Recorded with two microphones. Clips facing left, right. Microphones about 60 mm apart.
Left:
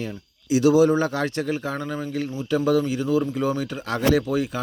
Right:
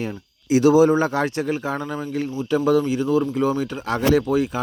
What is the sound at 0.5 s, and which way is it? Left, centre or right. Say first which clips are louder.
Speech: right 2 dB; right.